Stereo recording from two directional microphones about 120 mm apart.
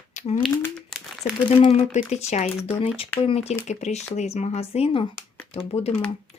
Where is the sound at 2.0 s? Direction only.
65° left (ahead or behind).